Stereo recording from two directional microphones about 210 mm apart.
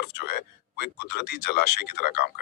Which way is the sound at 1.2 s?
50° left (ahead or behind).